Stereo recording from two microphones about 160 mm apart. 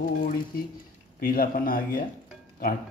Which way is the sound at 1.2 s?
65° left (ahead or behind).